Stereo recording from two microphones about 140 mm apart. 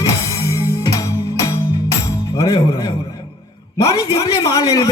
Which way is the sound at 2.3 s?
25° left (ahead or behind).